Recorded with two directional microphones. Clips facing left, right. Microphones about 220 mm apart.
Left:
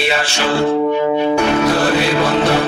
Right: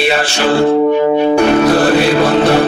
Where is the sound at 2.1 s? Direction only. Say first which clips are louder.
Right 4 dB; 55° right (ahead or behind).